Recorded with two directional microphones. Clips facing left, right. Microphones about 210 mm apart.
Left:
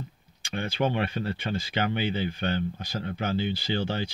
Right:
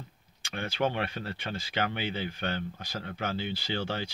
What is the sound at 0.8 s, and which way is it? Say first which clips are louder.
Speech: left 3 dB; 25° left (ahead or behind).